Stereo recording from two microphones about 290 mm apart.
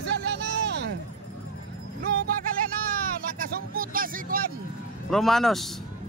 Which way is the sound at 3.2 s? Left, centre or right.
Right.